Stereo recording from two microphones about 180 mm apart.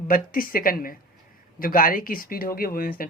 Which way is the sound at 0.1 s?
55° left (ahead or behind).